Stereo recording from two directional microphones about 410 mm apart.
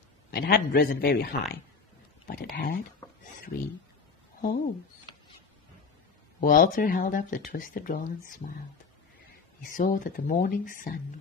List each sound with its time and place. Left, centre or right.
0.3 s speech: left
6.4 s speech: centre
9.7 s speech: centre